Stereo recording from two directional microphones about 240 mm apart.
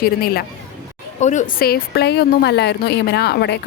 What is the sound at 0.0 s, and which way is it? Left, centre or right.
A woman's voice, left.